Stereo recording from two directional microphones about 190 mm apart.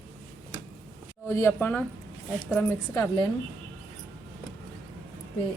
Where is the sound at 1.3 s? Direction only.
15° left (ahead or behind).